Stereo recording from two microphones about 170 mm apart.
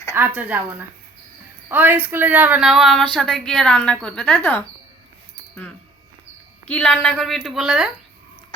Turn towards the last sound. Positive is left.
turn(degrees=-5)  # may be behind; listen again after turning